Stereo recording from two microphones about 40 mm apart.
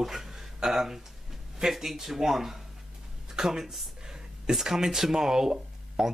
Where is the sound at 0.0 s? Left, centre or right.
Centre.